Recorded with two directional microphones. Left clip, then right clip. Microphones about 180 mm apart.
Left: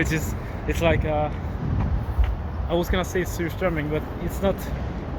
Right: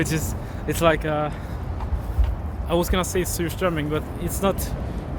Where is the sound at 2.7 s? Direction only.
20° right (ahead or behind).